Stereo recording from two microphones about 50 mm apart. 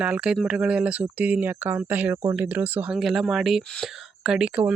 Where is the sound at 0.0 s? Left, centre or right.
Right.